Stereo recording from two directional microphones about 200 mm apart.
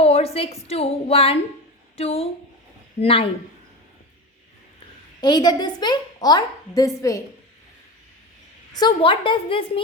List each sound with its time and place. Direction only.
0.0 s a woman's voice: 30° left (ahead or behind)
5.2 s a child's voice: 20° left (ahead or behind)
8.7 s a child's voice: 20° left (ahead or behind)